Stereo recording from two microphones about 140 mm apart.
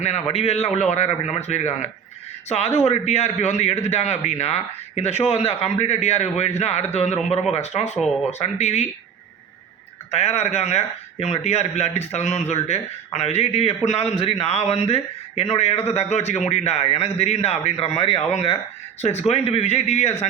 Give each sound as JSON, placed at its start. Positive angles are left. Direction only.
{"t": 0.0, "sound": "a man's voice", "side_deg": 50}
{"t": 10.1, "sound": "a man's voice", "side_deg": 50}